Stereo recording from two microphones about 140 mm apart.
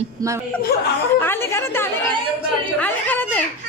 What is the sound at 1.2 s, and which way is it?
A woman's voice, 15° left (ahead or behind).